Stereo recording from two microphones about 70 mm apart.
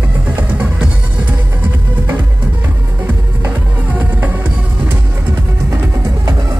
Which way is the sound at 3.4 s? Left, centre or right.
Right.